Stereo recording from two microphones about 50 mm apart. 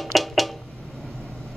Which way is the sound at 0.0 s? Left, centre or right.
Centre.